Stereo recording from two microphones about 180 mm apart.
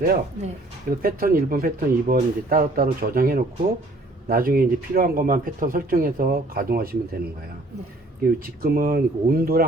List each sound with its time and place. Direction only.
0.0 s speech: 55° right (ahead or behind)
8.4 s speech: 55° right (ahead or behind)